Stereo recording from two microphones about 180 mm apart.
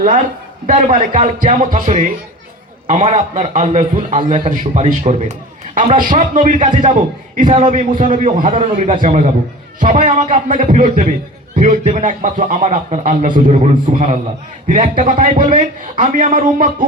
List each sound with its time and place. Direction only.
0.7 s a man's voice: 45° right (ahead or behind)